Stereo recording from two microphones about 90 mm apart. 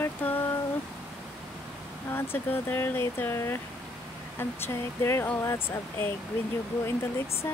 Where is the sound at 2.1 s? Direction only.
25° left (ahead or behind).